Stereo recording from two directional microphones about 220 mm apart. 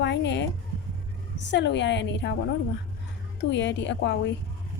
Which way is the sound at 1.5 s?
50° left (ahead or behind).